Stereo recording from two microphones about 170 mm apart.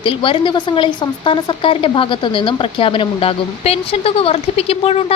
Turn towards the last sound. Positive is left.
turn(degrees=35)  # may be behind; listen again after turning